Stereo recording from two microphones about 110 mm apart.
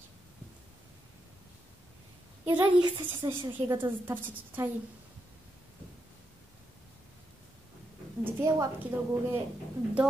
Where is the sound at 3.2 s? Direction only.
35° right (ahead or behind).